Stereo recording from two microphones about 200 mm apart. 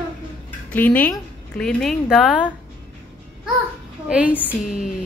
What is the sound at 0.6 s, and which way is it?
A woman's voice, 10° left (ahead or behind).